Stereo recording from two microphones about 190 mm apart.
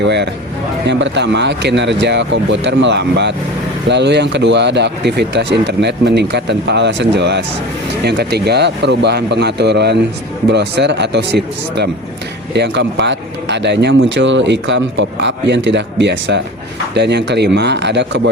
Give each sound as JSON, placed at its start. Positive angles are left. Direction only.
{"t": 0.0, "sound": "speech", "side_deg": -65}